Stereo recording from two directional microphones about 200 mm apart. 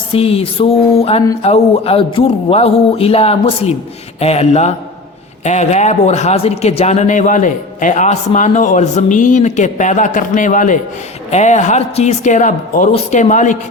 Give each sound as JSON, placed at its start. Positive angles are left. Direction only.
{"t": 0.1, "sound": "a man's voice", "side_deg": 30}